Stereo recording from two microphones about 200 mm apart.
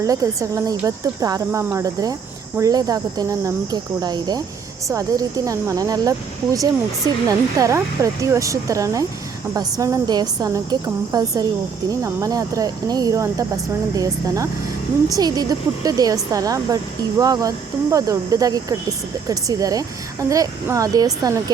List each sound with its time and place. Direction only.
0.0 s a woman's voice: 15° right (ahead or behind)